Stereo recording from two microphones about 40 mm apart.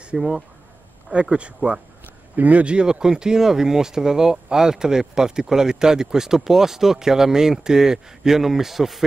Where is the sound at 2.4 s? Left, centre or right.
Right.